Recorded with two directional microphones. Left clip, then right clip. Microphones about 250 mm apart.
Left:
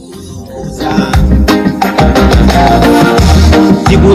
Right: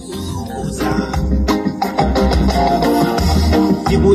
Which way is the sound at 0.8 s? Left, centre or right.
Left.